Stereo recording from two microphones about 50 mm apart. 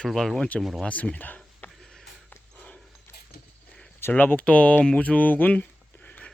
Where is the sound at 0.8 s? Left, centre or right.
Left.